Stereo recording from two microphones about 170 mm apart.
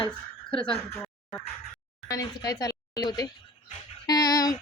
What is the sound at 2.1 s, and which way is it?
Speech, 20° left (ahead or behind).